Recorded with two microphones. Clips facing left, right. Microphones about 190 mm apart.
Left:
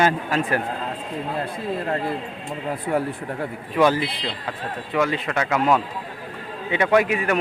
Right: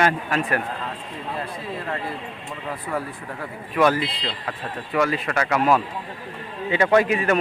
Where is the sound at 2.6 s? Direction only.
30° left (ahead or behind).